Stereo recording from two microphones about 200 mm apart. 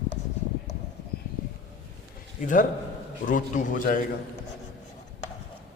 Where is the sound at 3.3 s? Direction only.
40° left (ahead or behind).